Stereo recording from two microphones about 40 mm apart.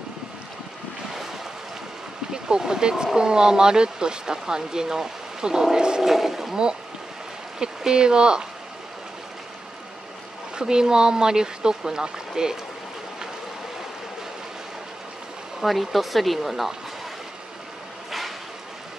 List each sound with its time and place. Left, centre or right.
2.3 s speech: centre
6.0 s speech: centre
6.5 s speech: centre
10.5 s speech: centre
15.6 s speech: centre